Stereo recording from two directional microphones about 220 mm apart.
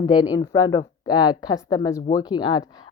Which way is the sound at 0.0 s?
20° left (ahead or behind).